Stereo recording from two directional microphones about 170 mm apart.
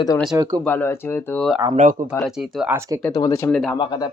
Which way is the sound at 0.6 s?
10° left (ahead or behind).